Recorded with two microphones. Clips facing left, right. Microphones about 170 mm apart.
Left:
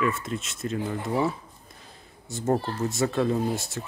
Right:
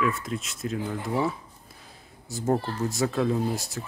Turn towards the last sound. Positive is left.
turn(degrees=0)  # may be behind; listen again after turning